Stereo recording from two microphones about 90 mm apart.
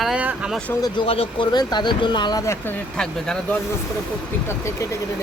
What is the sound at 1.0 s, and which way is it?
Speech, 90° left.